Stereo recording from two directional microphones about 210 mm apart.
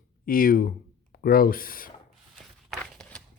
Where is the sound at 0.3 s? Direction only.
40° left (ahead or behind).